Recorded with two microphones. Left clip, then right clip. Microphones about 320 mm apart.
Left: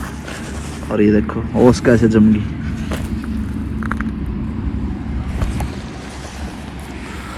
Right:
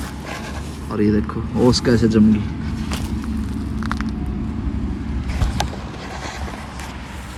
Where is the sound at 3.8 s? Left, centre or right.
Right.